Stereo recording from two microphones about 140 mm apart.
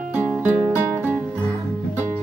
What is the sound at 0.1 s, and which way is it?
Music, 15° right (ahead or behind).